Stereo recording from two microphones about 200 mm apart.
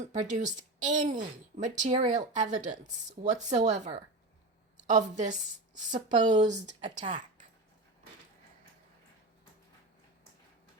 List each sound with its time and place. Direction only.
0.2 s a woman's voice: 35° right (ahead or behind)
6.7 s a woman's voice: 20° right (ahead or behind)